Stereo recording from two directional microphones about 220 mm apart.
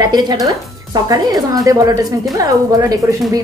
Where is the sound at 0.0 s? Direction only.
20° right (ahead or behind).